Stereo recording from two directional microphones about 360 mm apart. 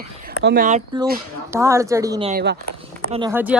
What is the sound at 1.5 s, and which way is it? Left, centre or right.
Speech, centre.